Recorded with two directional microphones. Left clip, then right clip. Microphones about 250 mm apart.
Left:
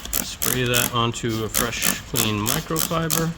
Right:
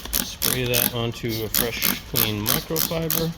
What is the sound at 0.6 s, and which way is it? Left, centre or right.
Speech, centre.